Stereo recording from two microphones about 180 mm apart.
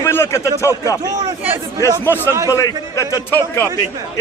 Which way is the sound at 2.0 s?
10° left (ahead or behind).